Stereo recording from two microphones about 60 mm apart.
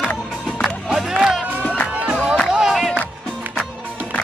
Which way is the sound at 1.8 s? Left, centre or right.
Right.